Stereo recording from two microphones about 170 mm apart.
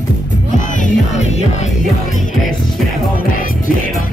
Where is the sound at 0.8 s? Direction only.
50° left (ahead or behind).